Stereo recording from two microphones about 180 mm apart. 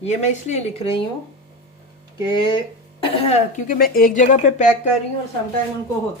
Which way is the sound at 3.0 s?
40° left (ahead or behind).